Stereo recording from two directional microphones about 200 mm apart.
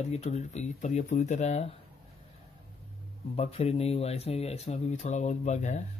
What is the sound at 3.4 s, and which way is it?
Speech, 30° left (ahead or behind).